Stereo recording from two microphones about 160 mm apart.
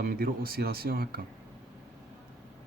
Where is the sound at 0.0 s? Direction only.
70° right (ahead or behind).